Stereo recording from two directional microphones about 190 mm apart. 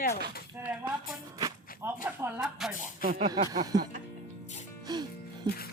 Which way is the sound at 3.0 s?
50° right (ahead or behind).